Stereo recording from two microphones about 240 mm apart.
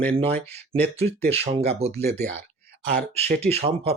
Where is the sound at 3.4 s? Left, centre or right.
Right.